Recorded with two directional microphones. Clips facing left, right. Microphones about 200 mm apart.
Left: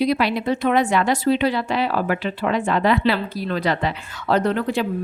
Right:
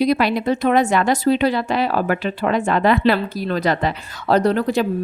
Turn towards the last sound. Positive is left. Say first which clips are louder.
# right 3 dB
turn(degrees=-40)  # may be behind; listen again after turning